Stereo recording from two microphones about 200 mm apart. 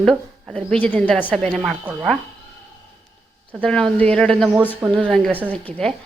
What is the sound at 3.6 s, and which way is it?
A woman's voice, 5° left (ahead or behind).